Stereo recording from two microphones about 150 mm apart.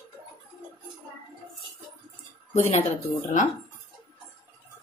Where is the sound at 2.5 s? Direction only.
50° left (ahead or behind).